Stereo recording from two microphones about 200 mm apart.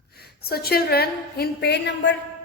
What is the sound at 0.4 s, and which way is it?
A woman's voice, 50° left (ahead or behind).